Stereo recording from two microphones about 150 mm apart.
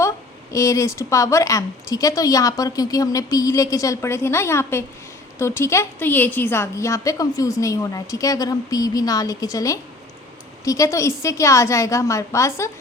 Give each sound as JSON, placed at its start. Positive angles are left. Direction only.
{"t": 0.5, "sound": "a woman's voice", "side_deg": 20}